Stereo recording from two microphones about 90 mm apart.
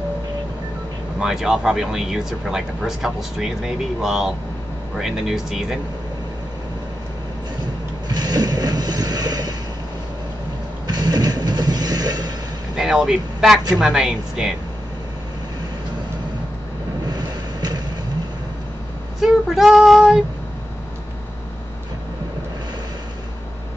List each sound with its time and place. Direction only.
1.2 s speech: 5° right (ahead or behind)
8.1 s vehicle: 50° right (ahead or behind)
10.9 s a sound: 45° right (ahead or behind)
12.7 s speech: 5° right (ahead or behind)
17.1 s vehicle: 50° right (ahead or behind)
19.1 s speech: 5° right (ahead or behind)